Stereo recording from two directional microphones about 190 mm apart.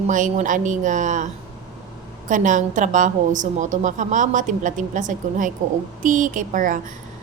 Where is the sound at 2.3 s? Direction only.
40° right (ahead or behind).